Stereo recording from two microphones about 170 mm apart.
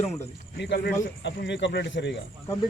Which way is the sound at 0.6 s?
80° left.